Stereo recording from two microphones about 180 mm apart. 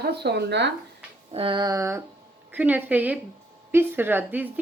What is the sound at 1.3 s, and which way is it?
Speech, 30° right (ahead or behind).